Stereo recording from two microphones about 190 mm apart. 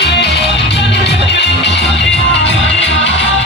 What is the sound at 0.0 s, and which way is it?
Music, 60° left (ahead or behind).